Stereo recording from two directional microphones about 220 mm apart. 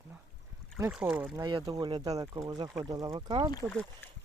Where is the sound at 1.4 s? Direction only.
20° right (ahead or behind).